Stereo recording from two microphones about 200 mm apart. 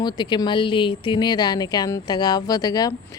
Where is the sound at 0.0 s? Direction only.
20° left (ahead or behind).